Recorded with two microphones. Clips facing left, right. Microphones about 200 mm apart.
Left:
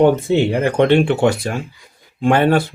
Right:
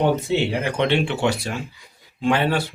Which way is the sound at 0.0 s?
50° left (ahead or behind).